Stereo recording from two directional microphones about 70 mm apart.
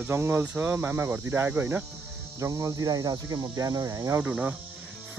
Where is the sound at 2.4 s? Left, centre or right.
Right.